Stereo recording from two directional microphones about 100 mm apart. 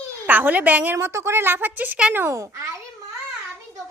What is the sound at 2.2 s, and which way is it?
Speech, 30° right (ahead or behind).